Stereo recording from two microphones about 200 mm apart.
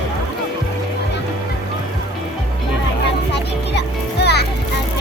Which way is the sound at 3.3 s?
55° left (ahead or behind).